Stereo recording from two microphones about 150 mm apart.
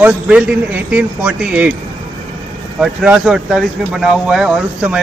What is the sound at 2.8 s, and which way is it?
A man's voice, 5° right (ahead or behind).